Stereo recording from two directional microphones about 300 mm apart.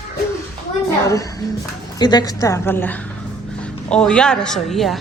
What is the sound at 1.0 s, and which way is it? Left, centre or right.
A woman's voice, centre.